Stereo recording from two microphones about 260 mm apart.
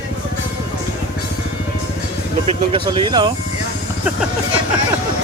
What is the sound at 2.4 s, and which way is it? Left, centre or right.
Speech, right.